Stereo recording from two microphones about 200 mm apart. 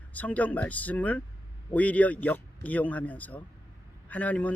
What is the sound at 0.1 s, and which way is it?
Speech, 5° left (ahead or behind).